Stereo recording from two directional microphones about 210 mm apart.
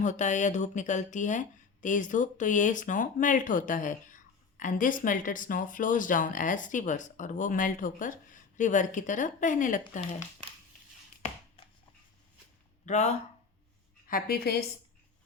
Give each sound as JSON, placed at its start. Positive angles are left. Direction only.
{"t": 0.0, "sound": "speech", "side_deg": 35}
{"t": 11.2, "sound": "chopping", "side_deg": 25}
{"t": 12.8, "sound": "speech", "side_deg": 35}
{"t": 14.1, "sound": "a woman's voice", "side_deg": 45}